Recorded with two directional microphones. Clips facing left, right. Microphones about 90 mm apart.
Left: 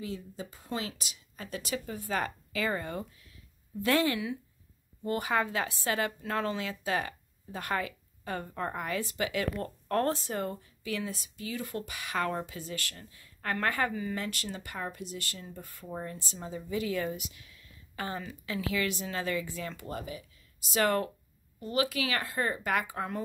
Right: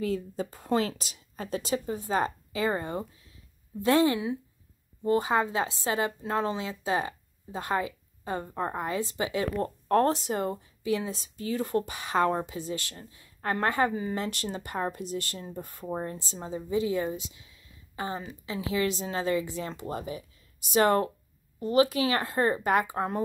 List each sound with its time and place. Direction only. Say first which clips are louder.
0.0 s a woman's voice: right 9 dB; 45° right (ahead or behind); by 23.2 s 30° right (ahead or behind)